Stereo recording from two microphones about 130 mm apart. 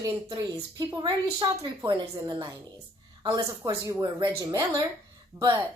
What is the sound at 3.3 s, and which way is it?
Speech, 25° right (ahead or behind).